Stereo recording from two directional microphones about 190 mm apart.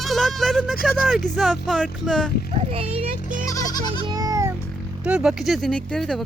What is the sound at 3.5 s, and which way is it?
Goat, 20° left (ahead or behind).